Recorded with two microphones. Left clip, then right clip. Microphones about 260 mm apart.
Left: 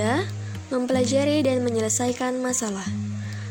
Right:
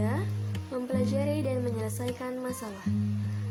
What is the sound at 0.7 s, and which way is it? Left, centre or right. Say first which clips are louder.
A woman's voice: left 9 dB; right.